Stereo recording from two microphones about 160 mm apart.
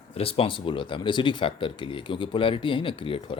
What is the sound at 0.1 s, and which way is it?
Speech, 35° left (ahead or behind).